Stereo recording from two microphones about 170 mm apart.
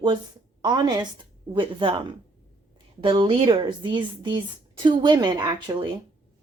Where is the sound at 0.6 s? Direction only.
25° right (ahead or behind).